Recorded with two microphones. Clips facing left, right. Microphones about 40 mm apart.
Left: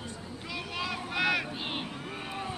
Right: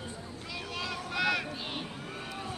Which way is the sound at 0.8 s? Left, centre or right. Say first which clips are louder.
Left 1 dB; centre.